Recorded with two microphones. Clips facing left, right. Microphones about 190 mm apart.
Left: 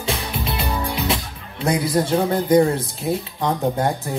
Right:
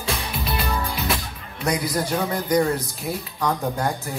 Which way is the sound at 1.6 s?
30° left (ahead or behind).